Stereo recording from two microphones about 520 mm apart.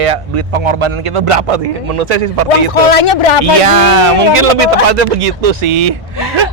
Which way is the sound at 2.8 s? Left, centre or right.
Left.